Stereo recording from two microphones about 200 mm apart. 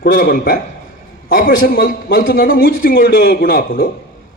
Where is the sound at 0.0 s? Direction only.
50° left (ahead or behind).